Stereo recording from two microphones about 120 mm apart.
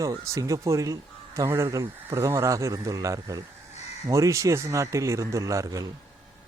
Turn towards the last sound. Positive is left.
turn(degrees=-25)  # may be behind; listen again after turning